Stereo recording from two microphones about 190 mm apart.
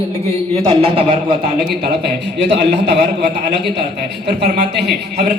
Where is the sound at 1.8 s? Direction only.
60° right (ahead or behind).